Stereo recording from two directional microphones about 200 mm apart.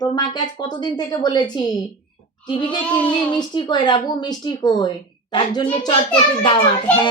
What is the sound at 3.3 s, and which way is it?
A woman's voice, 20° left (ahead or behind).